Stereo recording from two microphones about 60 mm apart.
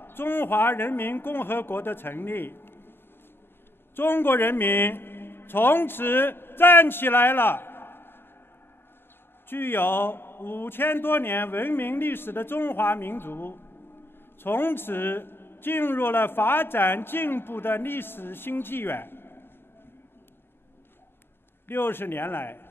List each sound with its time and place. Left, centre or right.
0.0 s a man's voice: left
3.9 s a man's voice: left
9.5 s a man's voice: left
21.6 s a man's voice: left